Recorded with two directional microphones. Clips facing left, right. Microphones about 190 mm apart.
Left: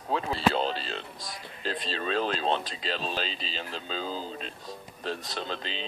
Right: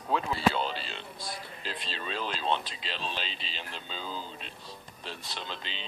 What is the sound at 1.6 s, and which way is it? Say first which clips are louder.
Speech: left 11 dB; 40° left (ahead or behind).